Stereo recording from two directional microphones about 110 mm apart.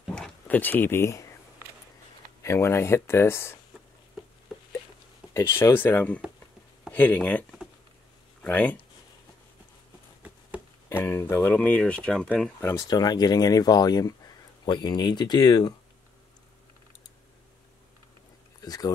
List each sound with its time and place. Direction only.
0.0 s a sound: 5° left (ahead or behind)
0.6 s speech: 15° left (ahead or behind)
2.4 s speech: 25° left (ahead or behind)
5.3 s speech: 25° left (ahead or behind)
10.9 s speech: 20° left (ahead or behind)
11.5 s speech: 15° left (ahead or behind)
12.5 s speech: 20° left (ahead or behind)
12.8 s speech: 40° left (ahead or behind)
18.6 s a sound: 35° left (ahead or behind)